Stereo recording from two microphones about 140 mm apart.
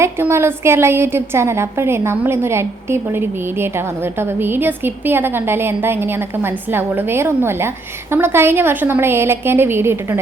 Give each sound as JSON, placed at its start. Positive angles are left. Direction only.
{"t": 0.0, "sound": "a woman's voice", "side_deg": -20}